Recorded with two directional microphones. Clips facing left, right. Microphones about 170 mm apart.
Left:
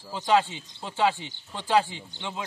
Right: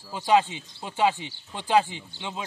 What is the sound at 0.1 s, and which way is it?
Speech, 15° right (ahead or behind).